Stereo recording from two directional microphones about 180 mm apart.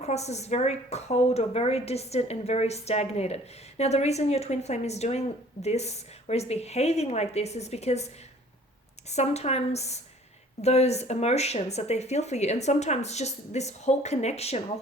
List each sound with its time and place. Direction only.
0.0 s a woman's voice: 35° left (ahead or behind)